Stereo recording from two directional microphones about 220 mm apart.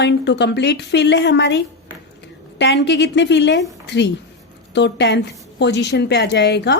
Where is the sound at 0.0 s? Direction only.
50° left (ahead or behind).